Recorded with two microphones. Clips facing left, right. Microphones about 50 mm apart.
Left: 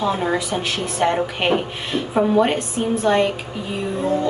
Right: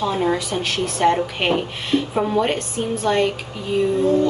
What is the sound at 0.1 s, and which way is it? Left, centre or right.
Speech, centre.